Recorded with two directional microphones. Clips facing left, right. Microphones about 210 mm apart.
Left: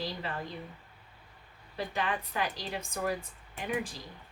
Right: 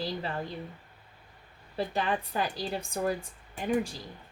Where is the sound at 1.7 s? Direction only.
35° right (ahead or behind).